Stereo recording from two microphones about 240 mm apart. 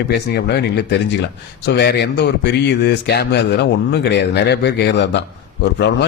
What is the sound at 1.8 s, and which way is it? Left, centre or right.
Speech, left.